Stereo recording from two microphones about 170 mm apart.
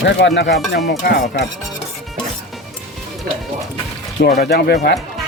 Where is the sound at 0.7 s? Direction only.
75° left (ahead or behind).